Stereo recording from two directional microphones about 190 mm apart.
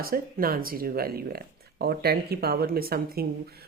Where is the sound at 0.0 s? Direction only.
50° right (ahead or behind).